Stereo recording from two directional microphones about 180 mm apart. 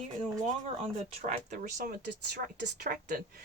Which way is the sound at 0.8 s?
45° right (ahead or behind).